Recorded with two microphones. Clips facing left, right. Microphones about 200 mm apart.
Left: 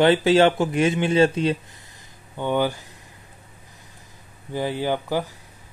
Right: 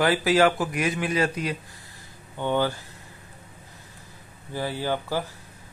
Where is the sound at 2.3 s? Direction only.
15° left (ahead or behind).